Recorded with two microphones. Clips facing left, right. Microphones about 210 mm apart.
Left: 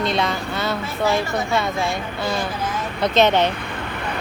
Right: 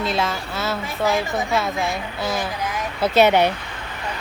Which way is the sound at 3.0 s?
10° right (ahead or behind).